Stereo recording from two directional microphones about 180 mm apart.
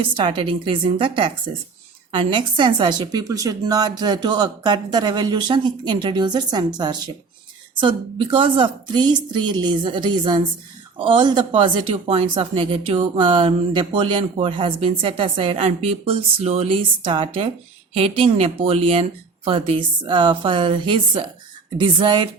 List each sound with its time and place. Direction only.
0.0 s a woman's voice: 30° right (ahead or behind)